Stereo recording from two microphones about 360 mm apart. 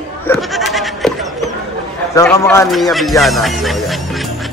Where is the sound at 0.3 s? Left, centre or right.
Centre.